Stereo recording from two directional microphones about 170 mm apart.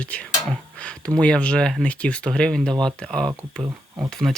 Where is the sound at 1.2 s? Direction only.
5° left (ahead or behind).